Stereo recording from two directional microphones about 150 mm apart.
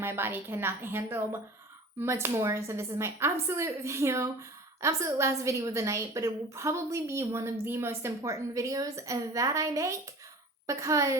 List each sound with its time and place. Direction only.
0.0 s a woman's voice: 15° right (ahead or behind)